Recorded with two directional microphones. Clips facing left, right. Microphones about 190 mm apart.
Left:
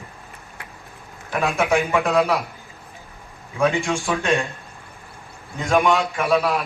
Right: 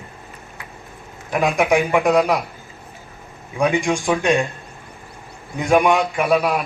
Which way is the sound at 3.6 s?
15° right (ahead or behind).